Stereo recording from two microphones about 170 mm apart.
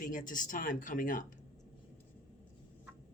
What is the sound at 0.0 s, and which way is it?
Speech, 50° left (ahead or behind).